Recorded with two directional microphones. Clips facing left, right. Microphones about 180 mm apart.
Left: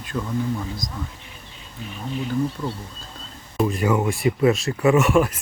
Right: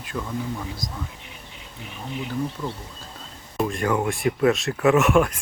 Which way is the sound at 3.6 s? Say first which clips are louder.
Left 2 dB; 5° left (ahead or behind).